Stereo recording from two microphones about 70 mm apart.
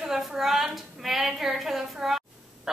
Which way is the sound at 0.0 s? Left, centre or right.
Centre.